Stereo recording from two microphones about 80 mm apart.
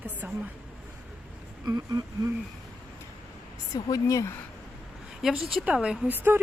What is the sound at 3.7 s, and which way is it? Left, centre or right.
Speech, left.